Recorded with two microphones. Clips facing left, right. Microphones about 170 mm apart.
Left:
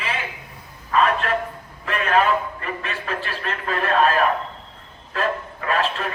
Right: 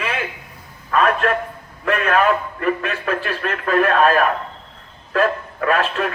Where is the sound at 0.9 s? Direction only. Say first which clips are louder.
Right 2 dB; 50° right (ahead or behind).